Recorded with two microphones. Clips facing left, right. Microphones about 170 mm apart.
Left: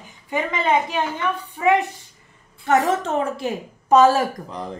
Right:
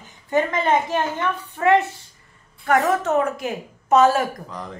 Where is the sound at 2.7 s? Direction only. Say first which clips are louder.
Even; 30° left (ahead or behind).